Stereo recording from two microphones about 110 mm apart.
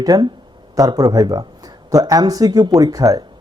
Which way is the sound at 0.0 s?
35° right (ahead or behind).